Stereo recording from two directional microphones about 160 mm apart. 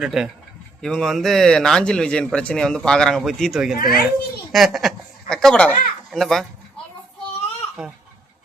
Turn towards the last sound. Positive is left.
turn(degrees=0)  # may be behind; listen again after turning